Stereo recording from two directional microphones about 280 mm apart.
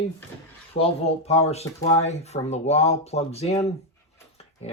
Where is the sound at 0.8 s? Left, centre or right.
Left.